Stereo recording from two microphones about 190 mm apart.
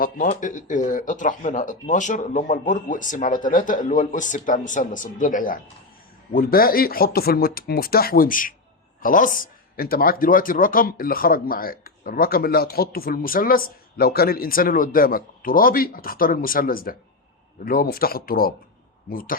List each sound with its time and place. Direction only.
0.0 s speech: 40° left (ahead or behind)